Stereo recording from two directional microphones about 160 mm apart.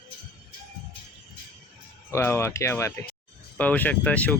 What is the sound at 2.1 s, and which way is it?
Speech, 15° left (ahead or behind).